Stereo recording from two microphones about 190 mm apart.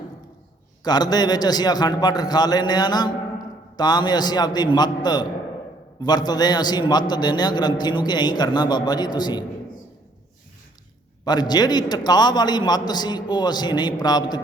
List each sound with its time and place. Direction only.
0.9 s a man's voice: 20° left (ahead or behind)
11.3 s a man's voice: 20° left (ahead or behind)